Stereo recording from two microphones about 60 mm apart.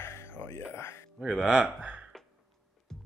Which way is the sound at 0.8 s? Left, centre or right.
Left.